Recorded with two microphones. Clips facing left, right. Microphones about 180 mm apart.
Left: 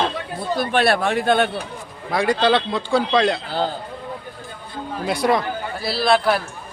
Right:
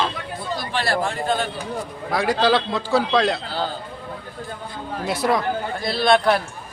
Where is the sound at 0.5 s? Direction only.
60° left (ahead or behind).